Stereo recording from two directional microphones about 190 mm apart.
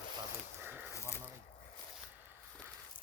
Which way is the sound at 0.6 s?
10° right (ahead or behind).